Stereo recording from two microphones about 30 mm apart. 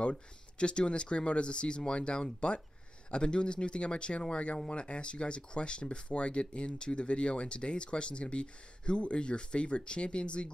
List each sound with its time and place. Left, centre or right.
0.0 s speech: left